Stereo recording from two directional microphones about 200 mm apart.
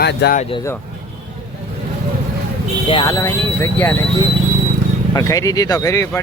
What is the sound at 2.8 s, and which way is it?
Speech, 20° left (ahead or behind).